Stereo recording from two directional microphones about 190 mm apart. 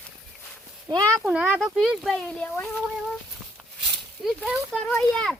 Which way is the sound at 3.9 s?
Centre (ahead or behind).